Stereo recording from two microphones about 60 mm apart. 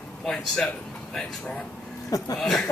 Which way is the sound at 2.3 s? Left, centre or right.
Centre.